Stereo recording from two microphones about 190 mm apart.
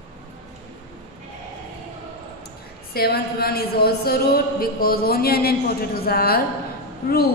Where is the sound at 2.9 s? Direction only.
55° left (ahead or behind).